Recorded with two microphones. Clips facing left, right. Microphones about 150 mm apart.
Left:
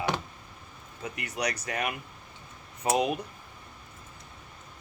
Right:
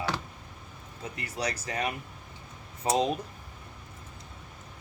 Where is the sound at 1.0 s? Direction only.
30° right (ahead or behind).